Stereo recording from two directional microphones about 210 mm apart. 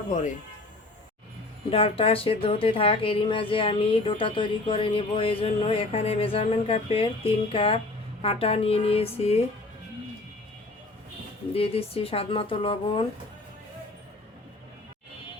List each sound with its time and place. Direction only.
0.1 s a man's voice: 35° left (ahead or behind)
1.7 s speech: 25° left (ahead or behind)
11.5 s speech: 30° left (ahead or behind)